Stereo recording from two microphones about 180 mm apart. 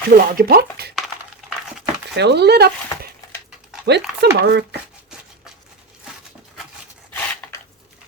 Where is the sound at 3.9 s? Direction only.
70° right (ahead or behind).